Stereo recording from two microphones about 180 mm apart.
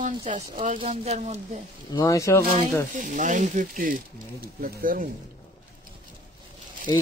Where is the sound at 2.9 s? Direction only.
45° right (ahead or behind).